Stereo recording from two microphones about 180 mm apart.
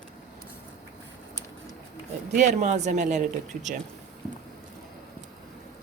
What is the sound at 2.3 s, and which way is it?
Speech, 40° right (ahead or behind).